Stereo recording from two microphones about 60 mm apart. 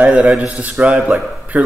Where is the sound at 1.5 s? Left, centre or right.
Right.